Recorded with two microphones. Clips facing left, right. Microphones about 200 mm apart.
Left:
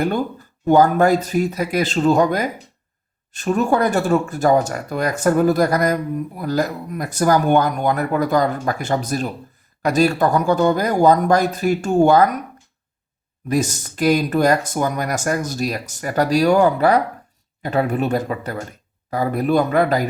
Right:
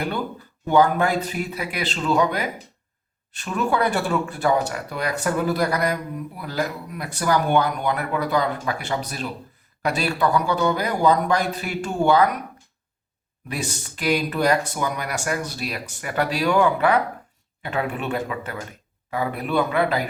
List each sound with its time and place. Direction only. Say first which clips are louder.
0.0 s speech: left 6 dB; 45° left (ahead or behind)
13.5 s speech: left 10 dB; 45° left (ahead or behind)